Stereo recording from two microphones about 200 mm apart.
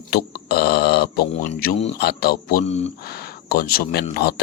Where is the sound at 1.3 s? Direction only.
40° left (ahead or behind).